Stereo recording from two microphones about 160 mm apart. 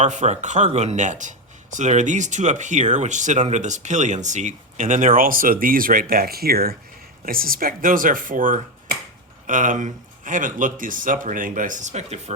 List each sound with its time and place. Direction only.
0.0 s speech: 50° right (ahead or behind)